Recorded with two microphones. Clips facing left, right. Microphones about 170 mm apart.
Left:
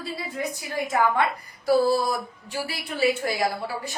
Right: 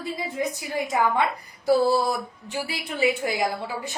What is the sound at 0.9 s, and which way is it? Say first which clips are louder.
Speech: left 1 dB; 15° right (ahead or behind).